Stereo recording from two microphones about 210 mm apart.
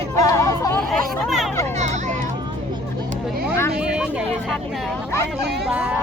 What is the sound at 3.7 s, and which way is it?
Speech, 5° right (ahead or behind).